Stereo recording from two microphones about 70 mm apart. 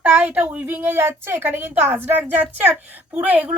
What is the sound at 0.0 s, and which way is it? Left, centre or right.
A woman's voice, right.